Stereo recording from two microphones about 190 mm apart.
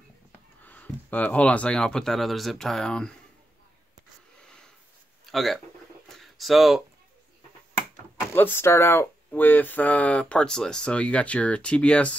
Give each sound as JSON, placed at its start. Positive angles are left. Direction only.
{"t": 0.6, "sound": "speech", "side_deg": 10}
{"t": 5.2, "sound": "speech", "side_deg": 0}
{"t": 6.0, "sound": "a sound", "side_deg": 0}
{"t": 8.4, "sound": "speech", "side_deg": 10}